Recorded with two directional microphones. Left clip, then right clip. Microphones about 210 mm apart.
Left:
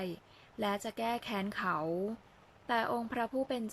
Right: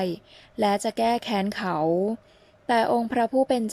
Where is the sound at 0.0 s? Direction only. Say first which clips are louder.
Right 13 dB; 20° right (ahead or behind).